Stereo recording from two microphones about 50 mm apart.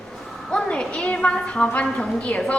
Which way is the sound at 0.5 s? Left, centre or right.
Centre.